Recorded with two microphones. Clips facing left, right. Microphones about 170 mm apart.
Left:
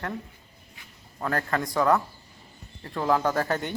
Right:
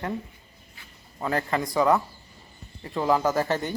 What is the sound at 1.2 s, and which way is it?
Speech, 5° right (ahead or behind).